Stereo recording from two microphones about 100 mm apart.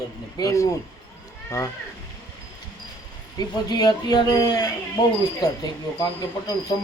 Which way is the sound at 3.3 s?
40° left (ahead or behind).